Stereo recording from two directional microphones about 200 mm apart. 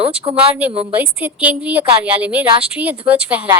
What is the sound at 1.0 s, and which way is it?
A woman's voice, 10° right (ahead or behind).